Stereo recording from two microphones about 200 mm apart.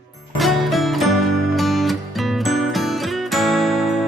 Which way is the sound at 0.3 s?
Centre (ahead or behind).